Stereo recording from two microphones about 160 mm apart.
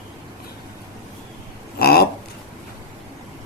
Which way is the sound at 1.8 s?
80° left.